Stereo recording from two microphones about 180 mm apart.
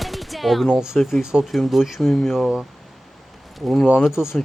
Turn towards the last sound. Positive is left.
turn(degrees=0)  # may be behind; listen again after turning